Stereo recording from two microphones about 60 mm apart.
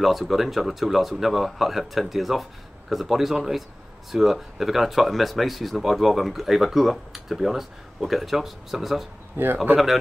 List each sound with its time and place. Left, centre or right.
0.0 s speech: centre
9.4 s speech: right